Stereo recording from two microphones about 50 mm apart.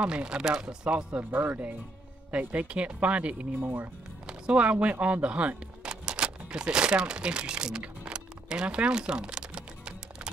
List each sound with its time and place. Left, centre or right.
0.0 s speech: centre
1.3 s speech: right
2.3 s speech: right
7.8 s a sound: right